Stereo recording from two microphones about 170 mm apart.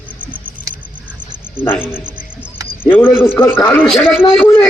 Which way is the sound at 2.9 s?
10° left (ahead or behind).